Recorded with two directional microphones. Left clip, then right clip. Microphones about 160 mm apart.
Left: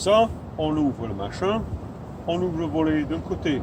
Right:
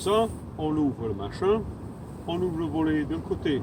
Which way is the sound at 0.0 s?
35° left (ahead or behind).